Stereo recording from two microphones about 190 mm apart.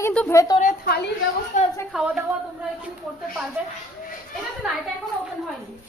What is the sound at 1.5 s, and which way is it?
Speech, 40° left (ahead or behind).